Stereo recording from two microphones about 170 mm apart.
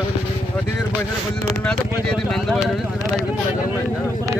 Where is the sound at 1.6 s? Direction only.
5° left (ahead or behind).